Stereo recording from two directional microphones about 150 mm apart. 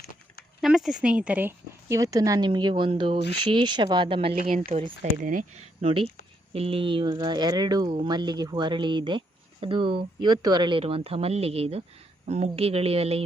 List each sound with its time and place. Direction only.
0.6 s a woman's voice: centre (ahead or behind); by 4.9 s 45° right (ahead or behind)
5.2 s speech: 65° right (ahead or behind)
5.8 s speech: 35° right (ahead or behind)